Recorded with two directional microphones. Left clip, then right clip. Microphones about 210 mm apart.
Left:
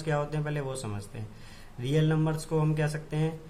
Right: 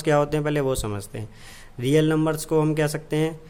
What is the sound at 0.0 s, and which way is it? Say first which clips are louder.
Speech: right 10 dB; 45° right (ahead or behind).